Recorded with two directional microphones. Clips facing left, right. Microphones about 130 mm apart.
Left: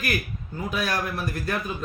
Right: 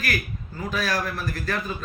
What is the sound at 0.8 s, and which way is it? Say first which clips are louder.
Speech: right 1 dB; 20° left (ahead or behind).